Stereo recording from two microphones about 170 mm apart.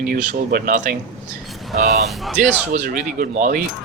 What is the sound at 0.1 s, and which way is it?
Speech, 55° right (ahead or behind).